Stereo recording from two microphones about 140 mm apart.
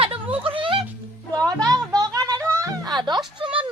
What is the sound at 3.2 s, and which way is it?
Speech, 5° right (ahead or behind).